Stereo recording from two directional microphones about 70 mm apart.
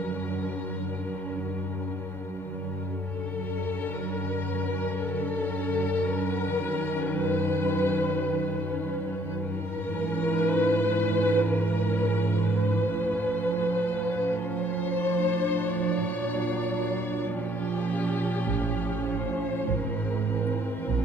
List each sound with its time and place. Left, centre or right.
5.4 s music: left
10.1 s music: left